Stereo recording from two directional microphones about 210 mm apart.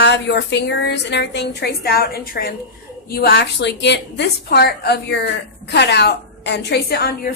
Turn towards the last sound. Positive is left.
turn(degrees=50)  # may be behind; listen again after turning